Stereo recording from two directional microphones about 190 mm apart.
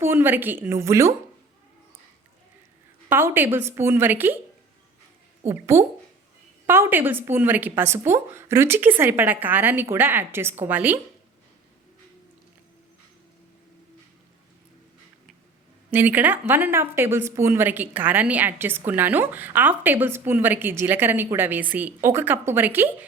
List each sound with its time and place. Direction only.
0.0 s a woman's voice: 10° right (ahead or behind)
3.1 s a woman's voice: 10° right (ahead or behind)
5.5 s a woman's voice: 15° right (ahead or behind)
15.9 s a woman's voice: 10° right (ahead or behind)